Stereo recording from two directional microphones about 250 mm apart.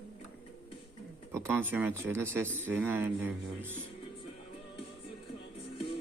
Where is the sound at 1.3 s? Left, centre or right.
Centre.